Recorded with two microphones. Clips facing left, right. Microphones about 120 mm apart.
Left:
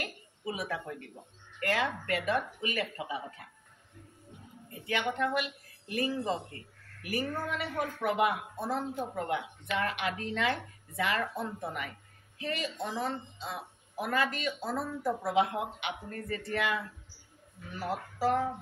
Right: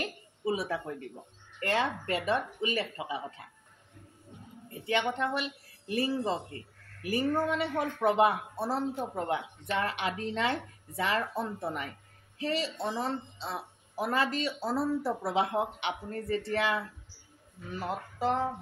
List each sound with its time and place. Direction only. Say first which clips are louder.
0.0 s a sound: right 5 dB; 30° right (ahead or behind)
1.6 s speech: right 1 dB; 30° right (ahead or behind)
4.8 s a woman's voice: right 1 dB; 30° right (ahead or behind)
12.4 s a woman's voice: right 3 dB; 30° right (ahead or behind)